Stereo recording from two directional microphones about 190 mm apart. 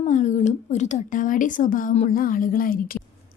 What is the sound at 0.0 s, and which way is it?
Speech, 40° left (ahead or behind).